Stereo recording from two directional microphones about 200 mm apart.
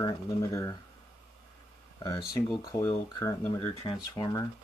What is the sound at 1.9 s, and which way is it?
Speech, 20° left (ahead or behind).